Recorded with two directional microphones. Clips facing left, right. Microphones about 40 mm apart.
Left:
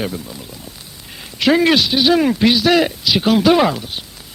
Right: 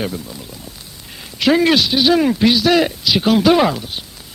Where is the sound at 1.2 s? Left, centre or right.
Left.